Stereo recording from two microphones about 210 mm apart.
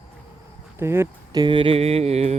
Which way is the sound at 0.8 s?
10° right (ahead or behind).